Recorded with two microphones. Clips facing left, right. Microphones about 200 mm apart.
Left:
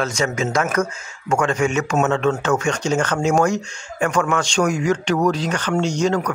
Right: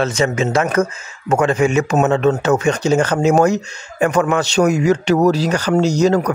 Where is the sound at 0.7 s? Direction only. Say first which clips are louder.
Right 4 dB; 30° right (ahead or behind).